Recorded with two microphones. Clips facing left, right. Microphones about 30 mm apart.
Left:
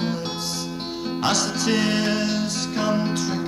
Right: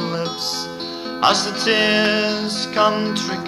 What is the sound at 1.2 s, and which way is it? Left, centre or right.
Music, right.